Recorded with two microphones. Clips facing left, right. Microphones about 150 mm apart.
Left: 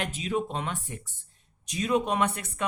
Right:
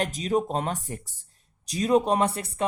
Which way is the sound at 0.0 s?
40° right (ahead or behind).